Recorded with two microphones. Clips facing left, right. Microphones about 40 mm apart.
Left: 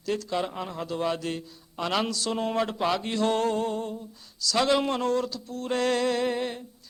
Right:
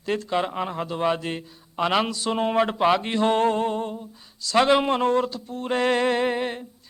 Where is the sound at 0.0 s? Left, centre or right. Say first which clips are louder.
Right 4 dB; right.